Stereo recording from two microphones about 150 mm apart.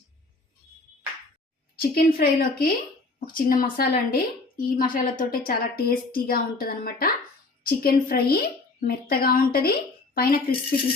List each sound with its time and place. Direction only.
1.7 s a woman's voice: 75° left (ahead or behind)
3.3 s a woman's voice: 70° left (ahead or behind)